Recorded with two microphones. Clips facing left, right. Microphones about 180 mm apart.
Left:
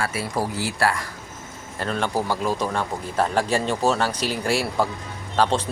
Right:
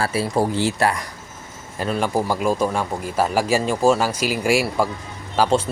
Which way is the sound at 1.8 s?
10° right (ahead or behind).